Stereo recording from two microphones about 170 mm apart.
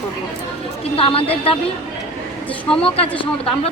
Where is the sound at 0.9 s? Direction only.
35° left (ahead or behind).